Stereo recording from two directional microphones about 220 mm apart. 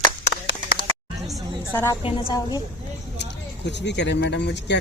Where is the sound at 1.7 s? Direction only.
15° left (ahead or behind).